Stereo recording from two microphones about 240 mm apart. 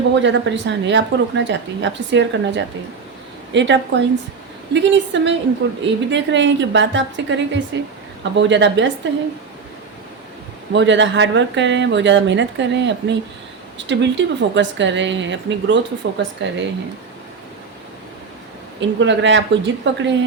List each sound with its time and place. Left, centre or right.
0.1 s a woman's voice: right
10.7 s a woman's voice: right
18.8 s a woman's voice: right